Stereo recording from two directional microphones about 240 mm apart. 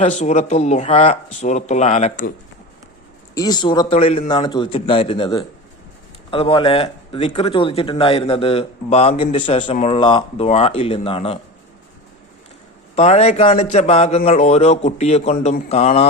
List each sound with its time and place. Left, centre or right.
0.2 s speech: left
3.3 s speech: centre
13.0 s speech: left